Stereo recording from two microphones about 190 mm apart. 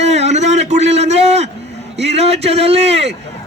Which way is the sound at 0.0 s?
35° right (ahead or behind).